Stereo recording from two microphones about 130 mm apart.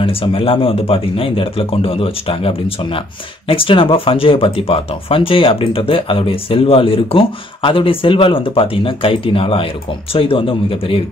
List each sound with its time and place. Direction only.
0.0 s speech: 45° left (ahead or behind)